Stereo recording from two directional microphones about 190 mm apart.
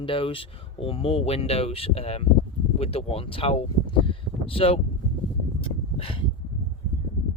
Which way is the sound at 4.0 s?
30° left (ahead or behind).